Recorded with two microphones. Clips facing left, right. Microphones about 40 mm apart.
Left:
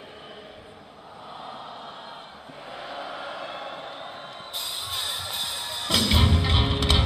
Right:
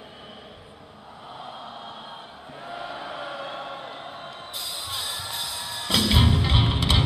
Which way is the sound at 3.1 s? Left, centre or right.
Centre.